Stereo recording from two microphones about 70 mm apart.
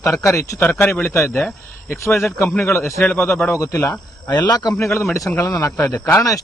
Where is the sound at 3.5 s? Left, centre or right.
Left.